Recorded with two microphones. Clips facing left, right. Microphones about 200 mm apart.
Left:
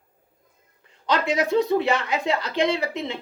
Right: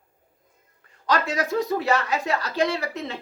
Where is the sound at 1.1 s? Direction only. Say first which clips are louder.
Left 2 dB; 25° left (ahead or behind).